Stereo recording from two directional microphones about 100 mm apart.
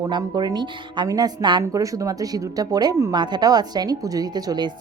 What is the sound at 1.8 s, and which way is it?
Speech, 35° right (ahead or behind).